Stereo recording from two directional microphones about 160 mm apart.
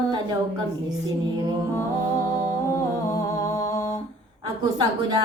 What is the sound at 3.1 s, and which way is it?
Music, 20° left (ahead or behind).